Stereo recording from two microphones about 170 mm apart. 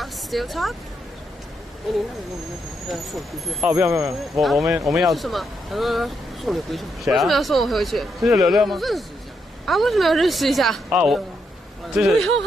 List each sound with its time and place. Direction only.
0.0 s a sound: centre (ahead or behind)
2.9 s speech: centre (ahead or behind)
3.7 s speech: 15° right (ahead or behind)
4.4 s speech: centre (ahead or behind)